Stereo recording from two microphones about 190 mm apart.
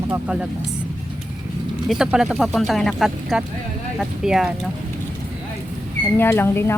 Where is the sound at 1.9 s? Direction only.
Centre (ahead or behind).